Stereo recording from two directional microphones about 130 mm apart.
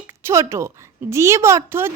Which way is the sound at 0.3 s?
20° right (ahead or behind).